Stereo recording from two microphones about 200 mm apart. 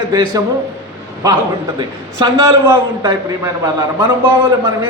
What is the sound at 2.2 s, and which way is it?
A man's voice, 15° right (ahead or behind).